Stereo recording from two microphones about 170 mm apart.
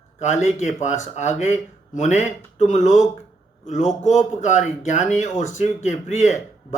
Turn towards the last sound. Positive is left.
turn(degrees=45)  # may be behind; listen again after turning